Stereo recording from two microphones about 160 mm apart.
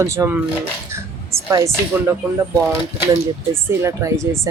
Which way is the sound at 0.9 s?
15° right (ahead or behind).